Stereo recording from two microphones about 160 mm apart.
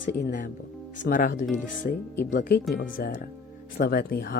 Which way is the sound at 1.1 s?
60° left (ahead or behind).